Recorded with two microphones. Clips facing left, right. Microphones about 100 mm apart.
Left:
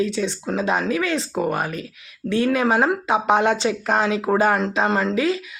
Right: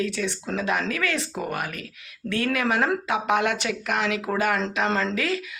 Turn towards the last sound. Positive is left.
turn(degrees=20)  # may be behind; listen again after turning